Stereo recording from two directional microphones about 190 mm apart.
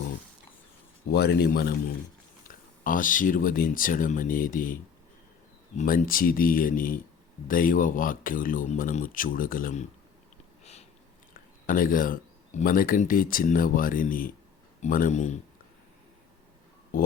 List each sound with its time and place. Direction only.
1.1 s speech: 55° left (ahead or behind)
2.8 s speech: 45° left (ahead or behind)
10.6 s a sound: 35° left (ahead or behind)
11.3 s speech: 45° left (ahead or behind)